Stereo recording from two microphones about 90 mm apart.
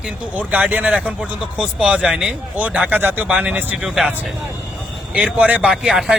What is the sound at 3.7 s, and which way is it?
Speech, 5° right (ahead or behind).